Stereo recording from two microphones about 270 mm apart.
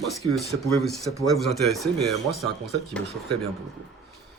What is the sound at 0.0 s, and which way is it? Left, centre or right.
Speech, centre.